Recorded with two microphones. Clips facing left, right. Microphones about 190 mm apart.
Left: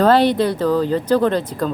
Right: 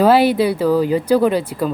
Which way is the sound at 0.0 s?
10° right (ahead or behind).